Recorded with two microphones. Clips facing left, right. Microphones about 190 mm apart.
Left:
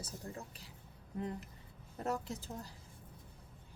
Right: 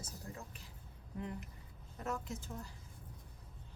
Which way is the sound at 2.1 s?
35° left (ahead or behind).